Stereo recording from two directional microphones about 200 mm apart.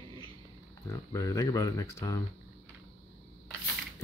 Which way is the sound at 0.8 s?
15° left (ahead or behind).